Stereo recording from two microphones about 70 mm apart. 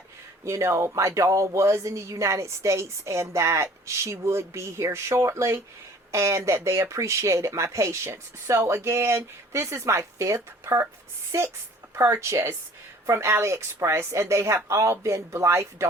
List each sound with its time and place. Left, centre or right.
0.4 s speech: right
11.9 s speech: right